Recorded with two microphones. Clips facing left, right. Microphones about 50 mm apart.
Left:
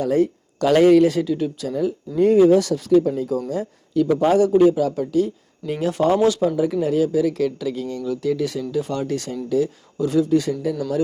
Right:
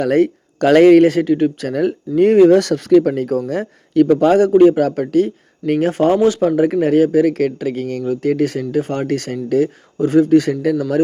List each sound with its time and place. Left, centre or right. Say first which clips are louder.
0.0 s a man's voice: right 5 dB; right
1.7 s a man's voice: right 5 dB; right
5.9 s a man's voice: right 1 dB; right
8.0 s a man's voice: right 5 dB; right
10.8 s speech: right 6 dB; right